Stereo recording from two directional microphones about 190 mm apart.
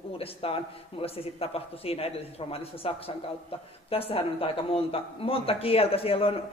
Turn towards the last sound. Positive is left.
turn(degrees=30)  # may be behind; listen again after turning